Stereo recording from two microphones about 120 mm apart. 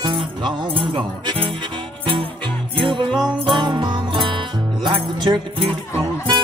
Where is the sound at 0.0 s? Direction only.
40° right (ahead or behind).